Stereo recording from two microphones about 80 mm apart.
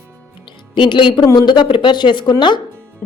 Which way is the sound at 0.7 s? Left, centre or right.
Left.